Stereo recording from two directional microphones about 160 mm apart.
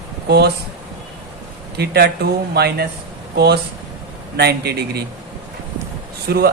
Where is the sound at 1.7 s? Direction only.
85° right.